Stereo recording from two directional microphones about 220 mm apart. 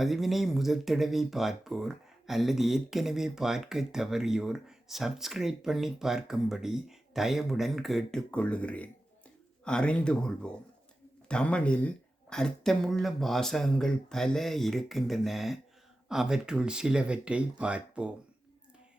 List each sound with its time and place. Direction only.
0.0 s speech: centre (ahead or behind)